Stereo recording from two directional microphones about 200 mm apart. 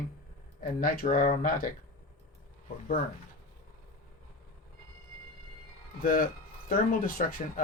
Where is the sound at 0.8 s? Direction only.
45° left (ahead or behind).